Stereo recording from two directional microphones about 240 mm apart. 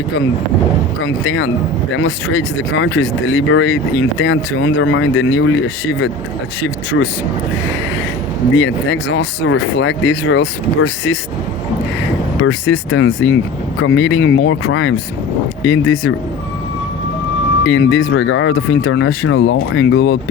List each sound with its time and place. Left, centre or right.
1.0 s speech: left
8.5 s speech: left
12.4 s speech: left
17.7 s speech: left